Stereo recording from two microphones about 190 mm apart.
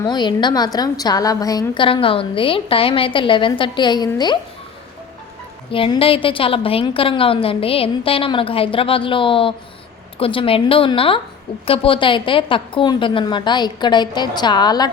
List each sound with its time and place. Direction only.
0.0 s a woman's voice: 20° left (ahead or behind)
5.7 s a woman's voice: 30° left (ahead or behind)